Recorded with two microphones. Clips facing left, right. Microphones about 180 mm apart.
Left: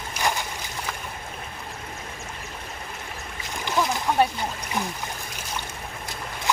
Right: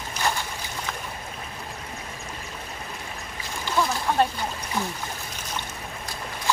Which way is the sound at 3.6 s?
15° left (ahead or behind).